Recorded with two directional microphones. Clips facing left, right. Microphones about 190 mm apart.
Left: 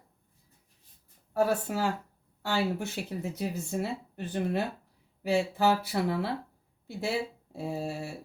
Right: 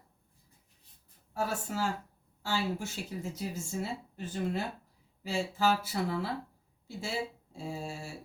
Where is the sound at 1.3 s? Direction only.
60° left (ahead or behind).